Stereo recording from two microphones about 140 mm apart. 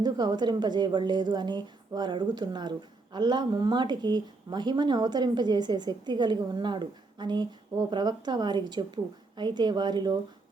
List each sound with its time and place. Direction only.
0.0 s a woman's voice: 30° right (ahead or behind)